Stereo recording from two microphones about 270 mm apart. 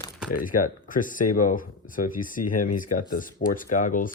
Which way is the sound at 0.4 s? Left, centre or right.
Left.